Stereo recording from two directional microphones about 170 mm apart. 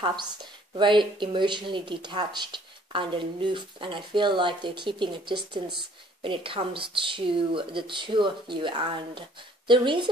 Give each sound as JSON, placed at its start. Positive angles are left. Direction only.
{"t": 0.0, "sound": "speech", "side_deg": -25}